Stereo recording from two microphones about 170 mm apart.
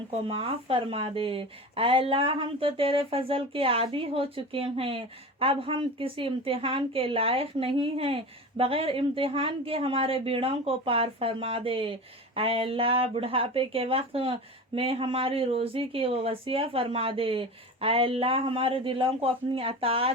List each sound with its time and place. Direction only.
0.1 s a woman's voice: 35° right (ahead or behind)